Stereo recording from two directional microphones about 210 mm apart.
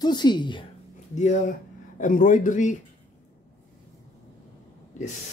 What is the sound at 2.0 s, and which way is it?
Speech, 40° left (ahead or behind).